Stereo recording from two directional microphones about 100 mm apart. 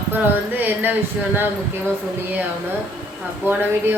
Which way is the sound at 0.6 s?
15° right (ahead or behind).